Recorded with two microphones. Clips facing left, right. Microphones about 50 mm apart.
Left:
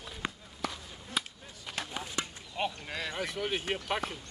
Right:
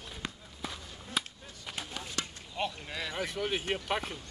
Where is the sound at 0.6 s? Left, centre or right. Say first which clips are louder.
Left 4 dB; left.